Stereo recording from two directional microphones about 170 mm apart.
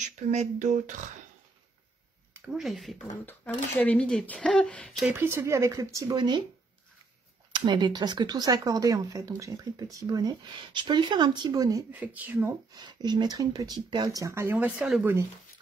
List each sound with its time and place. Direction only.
0.0 s speech: 45° right (ahead or behind)
2.4 s speech: centre (ahead or behind)
5.1 s speech: 15° right (ahead or behind)
7.5 s speech: 25° right (ahead or behind)
12.7 s speech: 25° right (ahead or behind); by 15.1 s 5° right (ahead or behind)